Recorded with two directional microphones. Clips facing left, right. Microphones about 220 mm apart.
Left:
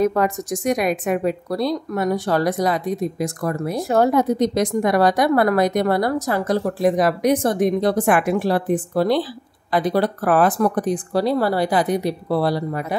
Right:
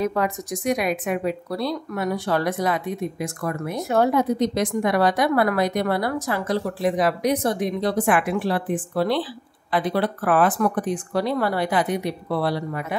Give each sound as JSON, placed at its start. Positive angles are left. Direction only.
{"t": 0.0, "sound": "a woman's voice", "side_deg": 45}